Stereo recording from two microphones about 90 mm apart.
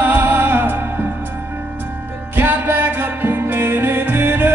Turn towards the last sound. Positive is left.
turn(degrees=-25)  # may be behind; listen again after turning